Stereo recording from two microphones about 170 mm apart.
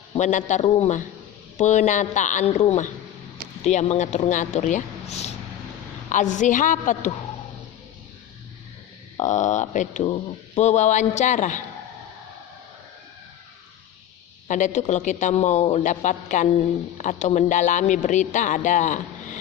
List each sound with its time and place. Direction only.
0.1 s speech: 45° left (ahead or behind)
9.1 s speech: 45° left (ahead or behind)
14.4 s speech: 45° left (ahead or behind)